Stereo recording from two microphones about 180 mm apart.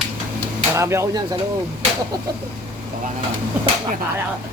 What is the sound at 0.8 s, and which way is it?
Speech, 15° right (ahead or behind).